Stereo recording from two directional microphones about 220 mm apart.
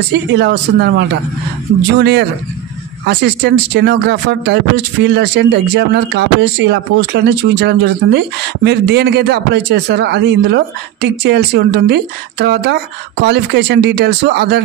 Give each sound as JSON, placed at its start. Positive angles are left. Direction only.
{"t": 0.1, "sound": "speech", "side_deg": -50}